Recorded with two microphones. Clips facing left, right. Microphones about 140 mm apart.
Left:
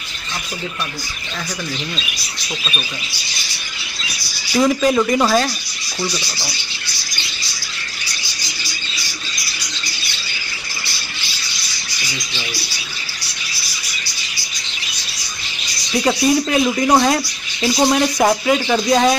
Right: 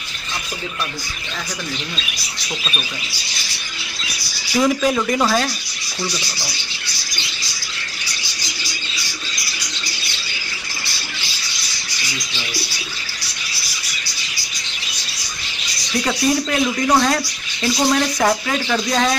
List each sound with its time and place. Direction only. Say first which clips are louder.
4.6 s speech: left 2 dB; centre (ahead or behind)
16.0 s speech: left 3 dB; 15° left (ahead or behind)